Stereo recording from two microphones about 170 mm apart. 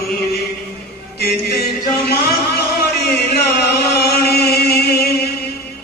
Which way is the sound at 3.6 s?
70° left (ahead or behind).